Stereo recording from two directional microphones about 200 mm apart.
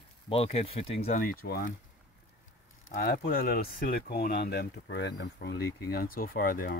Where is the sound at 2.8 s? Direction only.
45° left (ahead or behind).